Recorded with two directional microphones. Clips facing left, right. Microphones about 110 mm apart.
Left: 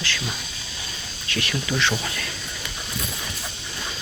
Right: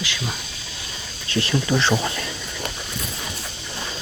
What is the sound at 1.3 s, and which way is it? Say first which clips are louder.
Speech: right 5 dB; 30° right (ahead or behind).